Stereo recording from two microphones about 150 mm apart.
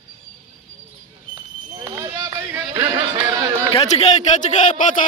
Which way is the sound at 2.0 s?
20° right (ahead or behind).